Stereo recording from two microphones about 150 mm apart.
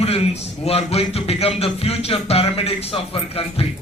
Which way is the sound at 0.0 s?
45° left (ahead or behind).